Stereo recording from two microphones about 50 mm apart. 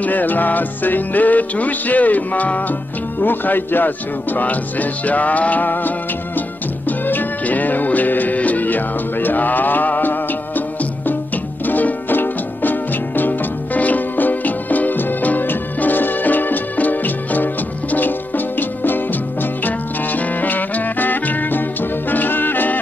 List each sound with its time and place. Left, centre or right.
0.0 s speech: left
3.2 s speech: left
7.1 s music: left